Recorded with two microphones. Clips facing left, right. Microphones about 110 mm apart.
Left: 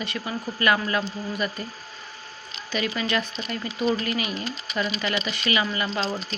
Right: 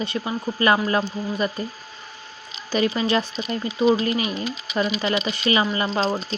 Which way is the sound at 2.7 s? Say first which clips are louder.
Right 6 dB; 30° right (ahead or behind).